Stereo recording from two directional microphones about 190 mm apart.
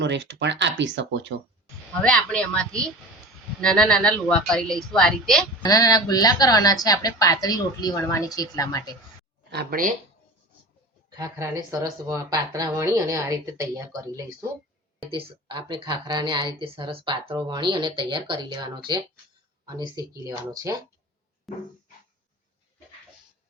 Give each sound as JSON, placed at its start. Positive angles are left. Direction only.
{"t": 0.0, "sound": "speech", "side_deg": -70}
{"t": 1.9, "sound": "a woman's voice", "side_deg": 5}
{"t": 5.6, "sound": "a woman's voice", "side_deg": 20}
{"t": 9.5, "sound": "speech", "side_deg": -55}
{"t": 11.2, "sound": "a woman's voice", "side_deg": -15}
{"t": 21.5, "sound": "a woman's voice", "side_deg": 0}